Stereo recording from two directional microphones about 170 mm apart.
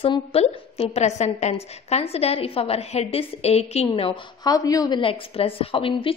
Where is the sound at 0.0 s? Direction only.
35° left (ahead or behind).